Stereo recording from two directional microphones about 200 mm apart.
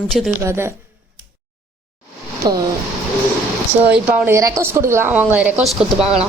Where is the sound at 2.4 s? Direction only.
20° right (ahead or behind).